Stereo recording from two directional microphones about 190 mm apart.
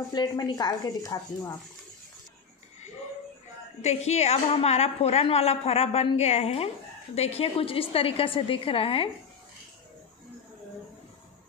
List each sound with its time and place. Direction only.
0.1 s a woman's voice: 20° left (ahead or behind)
3.8 s a woman's voice: 35° left (ahead or behind)